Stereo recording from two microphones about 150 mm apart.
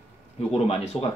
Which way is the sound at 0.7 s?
45° left (ahead or behind).